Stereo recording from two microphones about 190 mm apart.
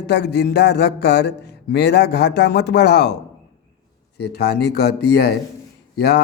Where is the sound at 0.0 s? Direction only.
60° left (ahead or behind).